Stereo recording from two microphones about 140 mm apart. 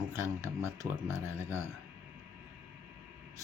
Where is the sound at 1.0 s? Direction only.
20° left (ahead or behind).